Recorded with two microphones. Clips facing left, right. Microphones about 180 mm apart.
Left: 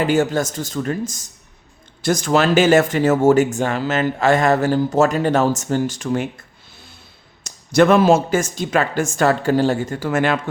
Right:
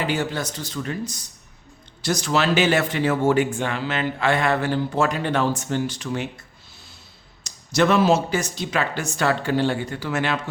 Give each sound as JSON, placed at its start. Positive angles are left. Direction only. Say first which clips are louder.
{"t": 0.0, "sound": "speech", "louder": "left 7 dB", "side_deg": 45}
{"t": 7.4, "sound": "speech", "louder": "left 6 dB", "side_deg": 50}